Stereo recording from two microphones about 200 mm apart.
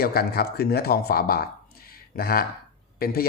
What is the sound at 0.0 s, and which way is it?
Speech, 50° left (ahead or behind).